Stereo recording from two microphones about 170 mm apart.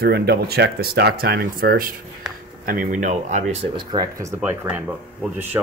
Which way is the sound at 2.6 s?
55° right (ahead or behind).